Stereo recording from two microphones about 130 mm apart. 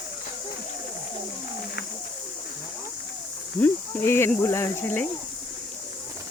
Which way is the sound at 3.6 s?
20° left (ahead or behind).